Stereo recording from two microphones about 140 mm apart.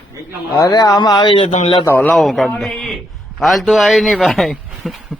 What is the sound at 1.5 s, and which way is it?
Speech, 50° left (ahead or behind).